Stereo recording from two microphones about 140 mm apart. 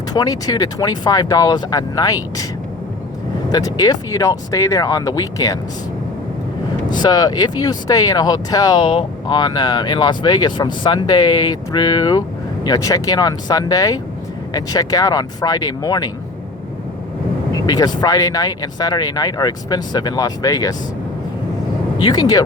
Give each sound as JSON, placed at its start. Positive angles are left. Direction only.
{"t": 0.1, "sound": "speech", "side_deg": 25}
{"t": 3.5, "sound": "speech", "side_deg": 25}
{"t": 7.0, "sound": "speech", "side_deg": 30}
{"t": 17.7, "sound": "speech", "side_deg": 30}
{"t": 21.9, "sound": "speech", "side_deg": 30}